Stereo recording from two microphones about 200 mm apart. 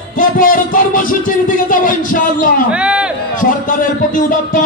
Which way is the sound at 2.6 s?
5° right (ahead or behind).